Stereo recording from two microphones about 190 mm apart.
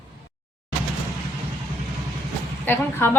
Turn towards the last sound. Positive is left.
turn(degrees=10)  # may be behind; listen again after turning